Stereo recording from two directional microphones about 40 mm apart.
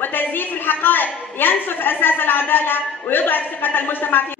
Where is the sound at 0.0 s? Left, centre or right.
Left.